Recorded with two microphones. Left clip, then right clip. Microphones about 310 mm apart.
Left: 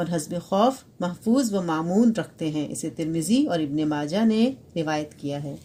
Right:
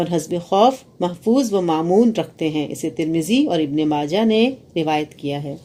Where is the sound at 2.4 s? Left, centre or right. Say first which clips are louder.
Right 7 dB; left.